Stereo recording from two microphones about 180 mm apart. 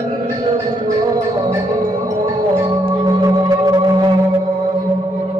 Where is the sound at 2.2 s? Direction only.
20° right (ahead or behind).